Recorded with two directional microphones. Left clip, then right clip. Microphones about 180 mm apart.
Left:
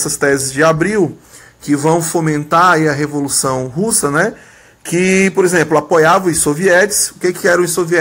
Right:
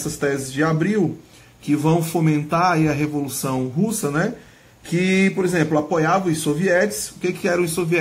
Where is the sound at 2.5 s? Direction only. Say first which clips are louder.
Left 10 dB; 30° left (ahead or behind).